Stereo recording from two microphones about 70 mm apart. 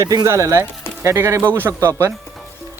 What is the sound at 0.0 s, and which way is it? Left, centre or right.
Speech, right.